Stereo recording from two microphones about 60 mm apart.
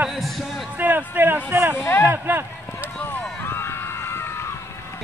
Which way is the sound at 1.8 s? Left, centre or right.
Left.